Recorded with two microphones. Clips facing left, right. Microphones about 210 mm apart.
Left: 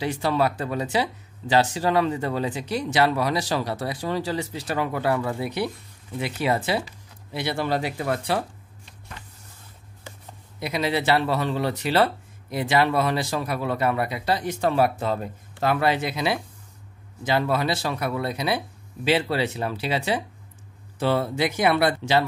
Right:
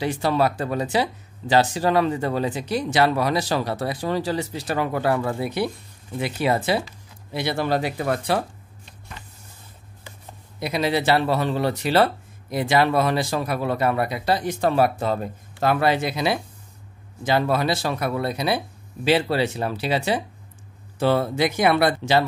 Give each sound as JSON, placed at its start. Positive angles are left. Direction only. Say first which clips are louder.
{"t": 0.0, "sound": "speech", "louder": "right 2 dB", "side_deg": -45}
{"t": 10.6, "sound": "speech", "louder": "right 2 dB", "side_deg": -35}